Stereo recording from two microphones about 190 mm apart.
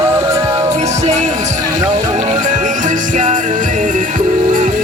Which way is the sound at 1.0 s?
35° right (ahead or behind).